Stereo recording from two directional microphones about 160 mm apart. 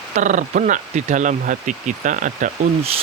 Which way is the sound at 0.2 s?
50° right (ahead or behind).